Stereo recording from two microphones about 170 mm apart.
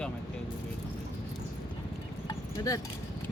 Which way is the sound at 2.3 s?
20° left (ahead or behind).